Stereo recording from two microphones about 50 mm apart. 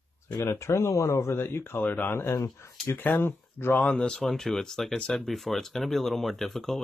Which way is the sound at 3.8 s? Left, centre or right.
Centre.